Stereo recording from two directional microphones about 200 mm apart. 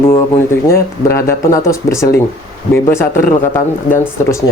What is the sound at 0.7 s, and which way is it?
Speech, 15° left (ahead or behind).